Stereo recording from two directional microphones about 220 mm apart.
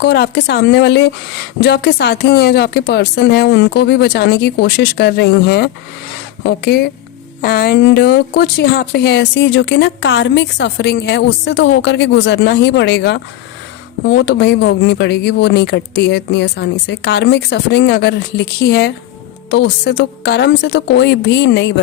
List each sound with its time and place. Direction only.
0.0 s speech: 50° left (ahead or behind)